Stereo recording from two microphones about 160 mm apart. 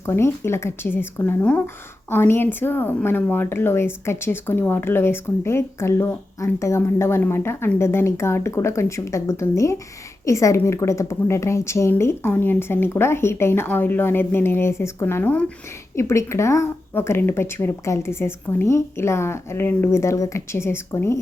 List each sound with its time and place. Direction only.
0.0 s a woman's voice: 15° left (ahead or behind)